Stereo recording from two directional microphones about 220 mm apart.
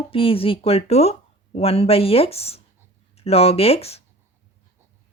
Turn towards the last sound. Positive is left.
turn(degrees=25)  # may be behind; listen again after turning